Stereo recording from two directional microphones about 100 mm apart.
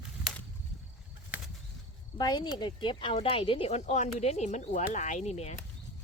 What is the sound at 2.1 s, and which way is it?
Speech, 40° left (ahead or behind).